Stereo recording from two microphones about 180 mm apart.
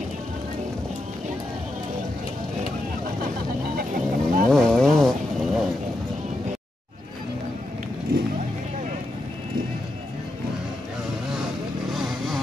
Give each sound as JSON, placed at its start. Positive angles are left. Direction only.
{"t": 3.7, "sound": "vehicle", "side_deg": -50}
{"t": 4.5, "sound": "vehicle", "side_deg": 0}
{"t": 11.9, "sound": "vehicle", "side_deg": 0}